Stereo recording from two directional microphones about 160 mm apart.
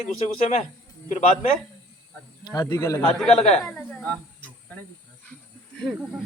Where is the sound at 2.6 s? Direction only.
20° left (ahead or behind).